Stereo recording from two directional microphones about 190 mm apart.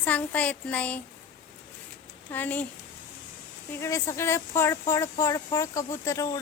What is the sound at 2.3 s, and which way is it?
Speech, 10° left (ahead or behind).